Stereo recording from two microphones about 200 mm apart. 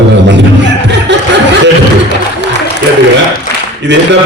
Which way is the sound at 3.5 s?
55° left (ahead or behind).